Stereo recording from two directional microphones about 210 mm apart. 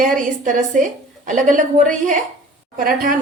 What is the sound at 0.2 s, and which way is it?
A woman's voice, 35° right (ahead or behind).